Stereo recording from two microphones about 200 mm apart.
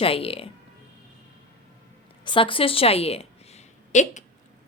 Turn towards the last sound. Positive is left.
turn(degrees=35)  # may be behind; listen again after turning